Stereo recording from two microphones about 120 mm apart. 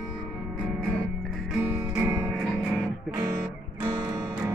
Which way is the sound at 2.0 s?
25° right (ahead or behind).